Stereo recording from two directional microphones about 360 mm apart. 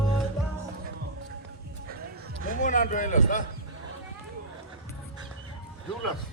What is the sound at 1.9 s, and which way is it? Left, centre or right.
Music, right.